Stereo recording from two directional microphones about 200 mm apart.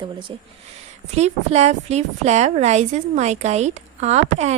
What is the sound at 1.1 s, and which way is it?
A woman's voice, 30° right (ahead or behind).